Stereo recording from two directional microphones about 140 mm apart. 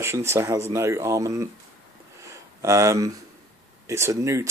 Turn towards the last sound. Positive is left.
turn(degrees=-20)  # may be behind; listen again after turning